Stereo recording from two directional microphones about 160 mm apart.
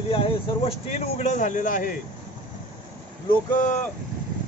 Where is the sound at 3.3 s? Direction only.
55° left (ahead or behind).